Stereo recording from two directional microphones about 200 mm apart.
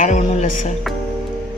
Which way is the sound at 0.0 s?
35° left (ahead or behind).